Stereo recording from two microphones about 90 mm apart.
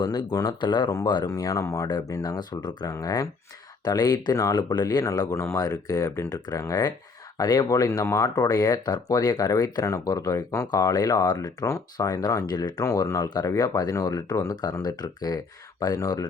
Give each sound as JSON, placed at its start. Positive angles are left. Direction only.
{"t": 0.0, "sound": "speech", "side_deg": 50}
{"t": 1.3, "sound": "speech", "side_deg": 40}
{"t": 2.8, "sound": "speech", "side_deg": 40}
{"t": 3.8, "sound": "speech", "side_deg": 50}
{"t": 4.5, "sound": "speech", "side_deg": 55}
{"t": 8.0, "sound": "speech", "side_deg": 35}
{"t": 12.8, "sound": "speech", "side_deg": 35}